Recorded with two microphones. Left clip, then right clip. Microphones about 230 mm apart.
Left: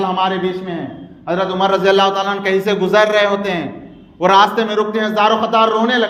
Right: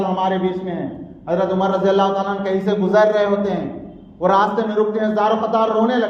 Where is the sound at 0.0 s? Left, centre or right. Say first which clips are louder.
Left 3 dB; left.